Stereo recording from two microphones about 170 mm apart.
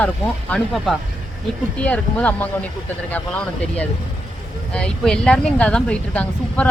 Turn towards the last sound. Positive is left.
turn(degrees=5)  # may be behind; listen again after turning